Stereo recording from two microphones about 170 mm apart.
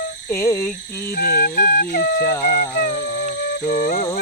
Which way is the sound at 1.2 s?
65° left (ahead or behind).